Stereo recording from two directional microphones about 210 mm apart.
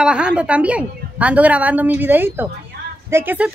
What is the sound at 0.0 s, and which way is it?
A woman's voice, 5° right (ahead or behind).